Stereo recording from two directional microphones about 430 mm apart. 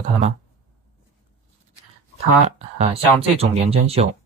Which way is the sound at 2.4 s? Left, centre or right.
Centre.